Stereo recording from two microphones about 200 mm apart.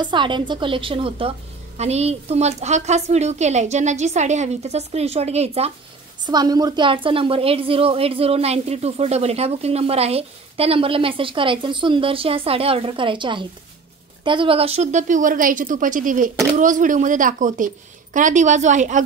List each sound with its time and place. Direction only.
0.0 s a woman's voice: 25° right (ahead or behind)
6.2 s a woman's voice: 20° right (ahead or behind); by 19.0 s 40° right (ahead or behind)